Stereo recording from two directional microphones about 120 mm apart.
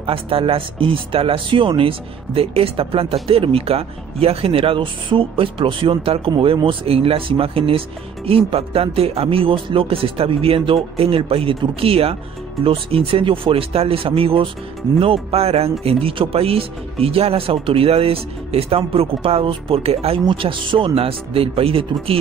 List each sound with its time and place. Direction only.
0.0 s speech: 50° right (ahead or behind)
20.2 s speech: 45° right (ahead or behind)